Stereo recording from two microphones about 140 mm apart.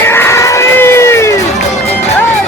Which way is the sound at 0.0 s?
15° left (ahead or behind).